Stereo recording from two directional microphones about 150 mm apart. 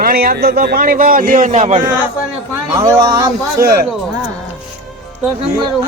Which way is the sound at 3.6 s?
80° right.